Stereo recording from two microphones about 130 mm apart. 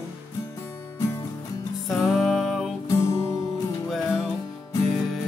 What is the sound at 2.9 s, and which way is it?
Music, 20° left (ahead or behind).